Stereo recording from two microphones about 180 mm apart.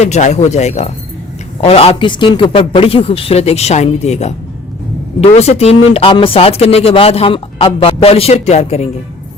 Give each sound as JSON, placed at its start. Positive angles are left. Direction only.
{"t": 0.0, "sound": "speech", "side_deg": 40}